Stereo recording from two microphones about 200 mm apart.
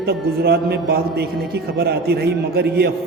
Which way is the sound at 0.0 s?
50° right (ahead or behind).